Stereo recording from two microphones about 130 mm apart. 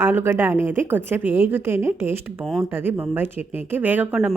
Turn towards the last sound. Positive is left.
turn(degrees=-10)  # may be behind; listen again after turning